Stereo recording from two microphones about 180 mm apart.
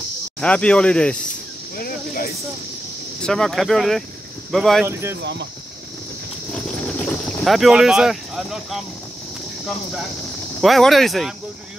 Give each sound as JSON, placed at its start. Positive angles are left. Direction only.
{"t": 0.4, "sound": "speech", "side_deg": 5}
{"t": 1.8, "sound": "cricket", "side_deg": 55}
{"t": 3.2, "sound": "speech", "side_deg": 5}
{"t": 5.2, "sound": "speech", "side_deg": -75}
{"t": 6.5, "sound": "cricket", "side_deg": 5}
{"t": 10.6, "sound": "speech", "side_deg": 0}